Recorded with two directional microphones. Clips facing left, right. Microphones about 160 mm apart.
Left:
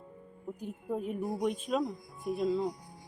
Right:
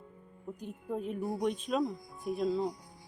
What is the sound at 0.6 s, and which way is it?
Speech, 5° left (ahead or behind).